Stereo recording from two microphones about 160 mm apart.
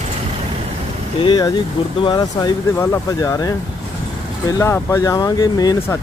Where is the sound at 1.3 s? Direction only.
25° left (ahead or behind).